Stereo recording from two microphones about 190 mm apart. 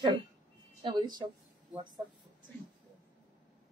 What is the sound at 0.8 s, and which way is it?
Speech, 20° right (ahead or behind).